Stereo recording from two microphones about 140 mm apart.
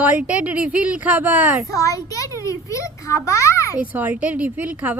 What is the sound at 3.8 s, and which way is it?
Speech, 10° right (ahead or behind).